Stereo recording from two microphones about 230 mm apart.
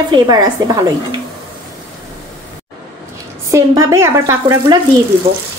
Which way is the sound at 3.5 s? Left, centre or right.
Centre.